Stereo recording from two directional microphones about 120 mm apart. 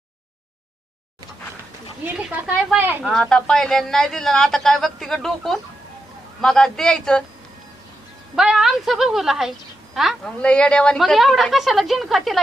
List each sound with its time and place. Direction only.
2.1 s speech: 10° right (ahead or behind)
3.0 s speech: 5° left (ahead or behind)
8.4 s speech: 5° right (ahead or behind)
10.4 s speech: 10° left (ahead or behind)